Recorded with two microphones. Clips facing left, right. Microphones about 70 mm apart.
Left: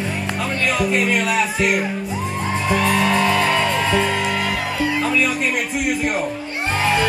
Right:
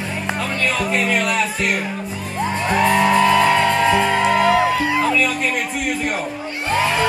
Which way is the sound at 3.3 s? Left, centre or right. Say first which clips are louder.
Right 3 dB; centre.